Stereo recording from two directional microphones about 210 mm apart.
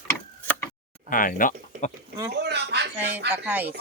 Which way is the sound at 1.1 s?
40° left (ahead or behind).